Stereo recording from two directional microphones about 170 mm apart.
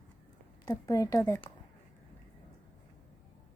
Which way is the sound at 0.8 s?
20° left (ahead or behind).